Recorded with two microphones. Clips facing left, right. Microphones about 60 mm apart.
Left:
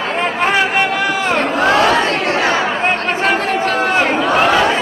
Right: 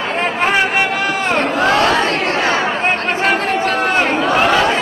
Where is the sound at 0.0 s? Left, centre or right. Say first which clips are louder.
Even; centre.